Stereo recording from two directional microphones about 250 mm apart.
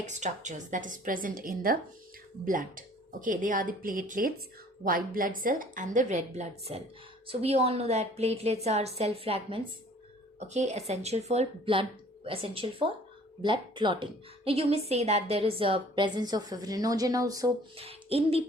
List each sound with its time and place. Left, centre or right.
0.0 s a woman's voice: right